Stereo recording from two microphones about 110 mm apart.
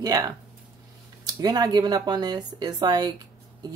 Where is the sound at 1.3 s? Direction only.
40° right (ahead or behind).